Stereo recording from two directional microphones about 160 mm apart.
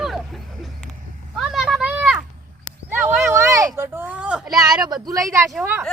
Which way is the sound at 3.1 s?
20° right (ahead or behind).